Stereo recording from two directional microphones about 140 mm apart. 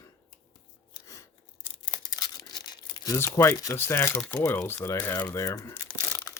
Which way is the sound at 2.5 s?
30° left (ahead or behind).